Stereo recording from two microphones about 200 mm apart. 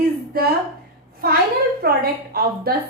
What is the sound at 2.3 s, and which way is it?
Speech, 50° right (ahead or behind).